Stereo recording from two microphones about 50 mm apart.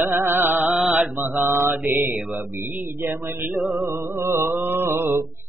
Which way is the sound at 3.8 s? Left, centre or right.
Right.